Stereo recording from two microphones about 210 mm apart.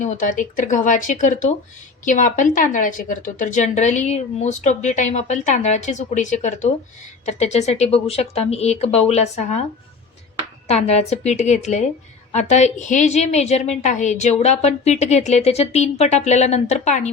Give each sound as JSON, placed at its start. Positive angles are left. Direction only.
{"t": 0.0, "sound": "a woman's voice", "side_deg": 35}
{"t": 10.7, "sound": "a woman's voice", "side_deg": 30}